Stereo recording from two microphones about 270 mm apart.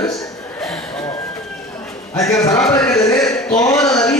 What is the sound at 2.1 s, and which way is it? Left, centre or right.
Speech, centre.